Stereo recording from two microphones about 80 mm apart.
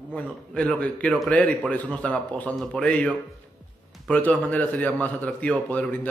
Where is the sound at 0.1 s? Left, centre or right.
Centre.